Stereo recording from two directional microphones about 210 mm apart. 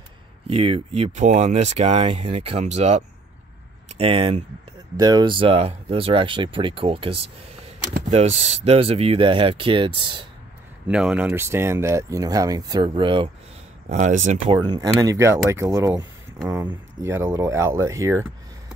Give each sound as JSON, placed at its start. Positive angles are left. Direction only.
{"t": 0.5, "sound": "speech", "side_deg": -25}
{"t": 10.9, "sound": "speech", "side_deg": -5}
{"t": 13.8, "sound": "speech", "side_deg": -35}
{"t": 14.5, "sound": "speech", "side_deg": -20}